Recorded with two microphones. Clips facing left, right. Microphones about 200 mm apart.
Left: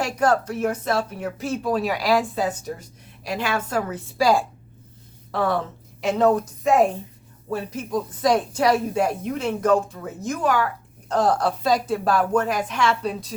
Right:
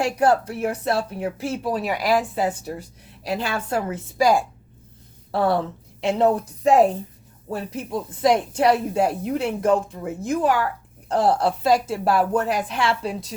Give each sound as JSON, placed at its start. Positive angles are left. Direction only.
{"t": 0.2, "sound": "a woman's voice", "side_deg": -35}
{"t": 4.2, "sound": "a woman's voice", "side_deg": -20}
{"t": 5.3, "sound": "a woman's voice", "side_deg": -35}